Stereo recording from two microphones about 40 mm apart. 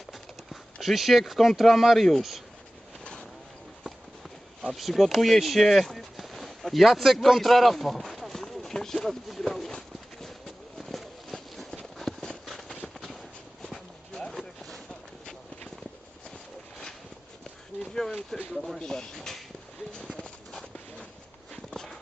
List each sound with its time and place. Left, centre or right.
0.1 s speech: centre
3.0 s vehicle: left
4.7 s speech: centre
9.3 s horse: centre
14.1 s a sound: centre
18.0 s a sound: centre
18.5 s a sound: centre
18.9 s speech: centre
20.5 s walk: centre
21.5 s clip-clop: centre